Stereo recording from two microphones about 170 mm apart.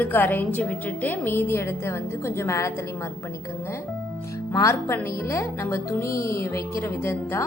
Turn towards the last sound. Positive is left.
turn(degrees=15)  # may be behind; listen again after turning